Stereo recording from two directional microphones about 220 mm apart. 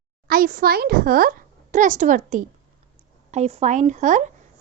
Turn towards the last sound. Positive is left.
turn(degrees=-35)  # may be behind; listen again after turning